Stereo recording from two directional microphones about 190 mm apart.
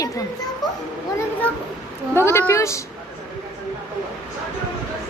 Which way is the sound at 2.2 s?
15° left (ahead or behind).